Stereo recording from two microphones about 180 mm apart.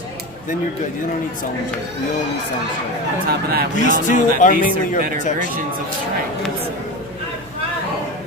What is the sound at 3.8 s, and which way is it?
Speech, 45° left (ahead or behind).